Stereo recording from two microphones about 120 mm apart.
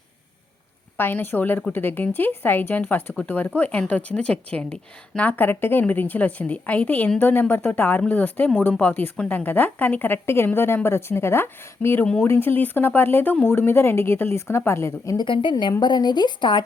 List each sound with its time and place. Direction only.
0.9 s speech: 20° left (ahead or behind)
15.2 s speech: 40° left (ahead or behind)